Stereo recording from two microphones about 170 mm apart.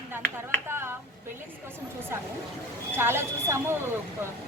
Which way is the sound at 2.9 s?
15° right (ahead or behind).